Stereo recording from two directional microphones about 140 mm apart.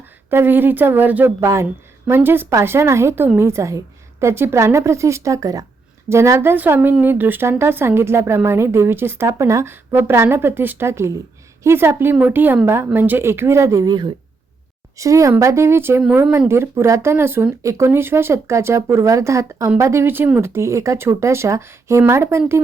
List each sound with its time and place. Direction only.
0.3 s speech: 15° right (ahead or behind)